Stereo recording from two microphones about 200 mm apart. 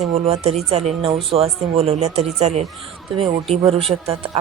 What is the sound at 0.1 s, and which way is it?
Speech, 30° right (ahead or behind).